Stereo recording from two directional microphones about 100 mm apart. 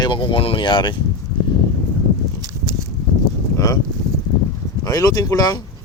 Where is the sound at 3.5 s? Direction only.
35° left (ahead or behind).